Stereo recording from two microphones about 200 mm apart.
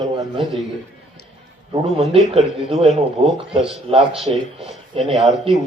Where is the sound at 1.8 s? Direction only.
30° right (ahead or behind).